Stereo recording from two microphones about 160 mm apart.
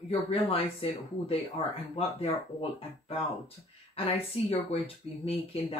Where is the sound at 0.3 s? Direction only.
35° left (ahead or behind).